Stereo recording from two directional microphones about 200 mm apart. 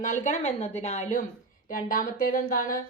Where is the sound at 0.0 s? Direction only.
40° left (ahead or behind).